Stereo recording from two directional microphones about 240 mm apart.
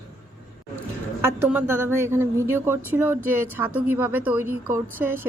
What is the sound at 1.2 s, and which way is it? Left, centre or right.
Speech, centre.